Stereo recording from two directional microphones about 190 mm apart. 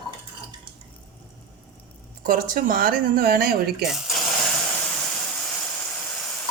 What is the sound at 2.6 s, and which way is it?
Speech, 50° right (ahead or behind).